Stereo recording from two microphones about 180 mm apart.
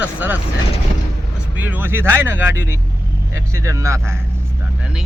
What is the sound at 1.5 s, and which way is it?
Speech, 10° right (ahead or behind).